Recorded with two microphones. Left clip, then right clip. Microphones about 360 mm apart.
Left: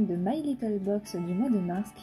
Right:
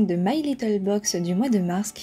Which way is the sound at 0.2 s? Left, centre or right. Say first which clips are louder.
Right 6 dB; centre.